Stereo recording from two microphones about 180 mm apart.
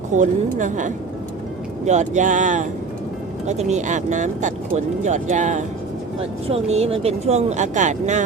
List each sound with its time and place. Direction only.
0.1 s a woman's voice: 45° right (ahead or behind)